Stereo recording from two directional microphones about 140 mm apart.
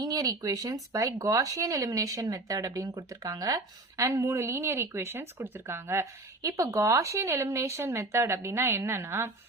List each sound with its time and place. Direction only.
0.0 s speech: 25° right (ahead or behind)